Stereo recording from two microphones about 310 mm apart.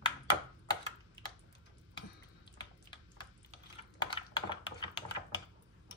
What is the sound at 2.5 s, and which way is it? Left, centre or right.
Tick-tock, centre.